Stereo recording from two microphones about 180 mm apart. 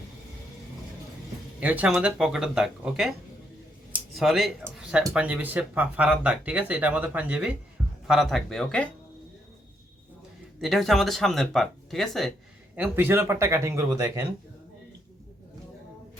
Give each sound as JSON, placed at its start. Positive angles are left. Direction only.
{"t": 1.6, "sound": "speech", "side_deg": -10}
{"t": 3.9, "sound": "a sound", "side_deg": 0}
{"t": 5.1, "sound": "speech", "side_deg": -5}
{"t": 10.6, "sound": "speech", "side_deg": 0}
{"t": 12.7, "sound": "speech", "side_deg": -10}